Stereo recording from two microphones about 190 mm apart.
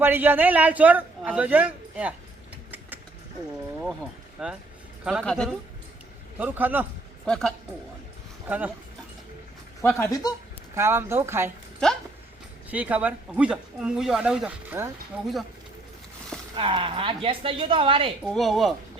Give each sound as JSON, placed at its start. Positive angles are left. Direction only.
{"t": 0.0, "sound": "a man's voice", "side_deg": -10}
{"t": 3.8, "sound": "a sound", "side_deg": 0}
{"t": 5.0, "sound": "speech", "side_deg": 0}
{"t": 6.4, "sound": "a man's voice", "side_deg": -10}
{"t": 7.3, "sound": "speech", "side_deg": 5}
{"t": 8.4, "sound": "a man's voice", "side_deg": -10}
{"t": 9.8, "sound": "speech", "side_deg": 15}
{"t": 10.8, "sound": "a man's voice", "side_deg": -15}
{"t": 12.7, "sound": "a man's voice", "side_deg": -10}
{"t": 16.6, "sound": "a woman's voice", "side_deg": -30}
{"t": 18.2, "sound": "speech", "side_deg": 0}